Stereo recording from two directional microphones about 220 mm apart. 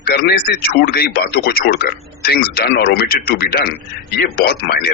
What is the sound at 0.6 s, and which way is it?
Speech, 45° left (ahead or behind).